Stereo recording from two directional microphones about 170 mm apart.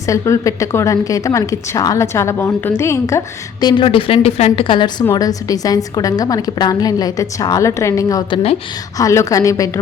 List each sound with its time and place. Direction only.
0.0 s a woman's voice: 20° left (ahead or behind)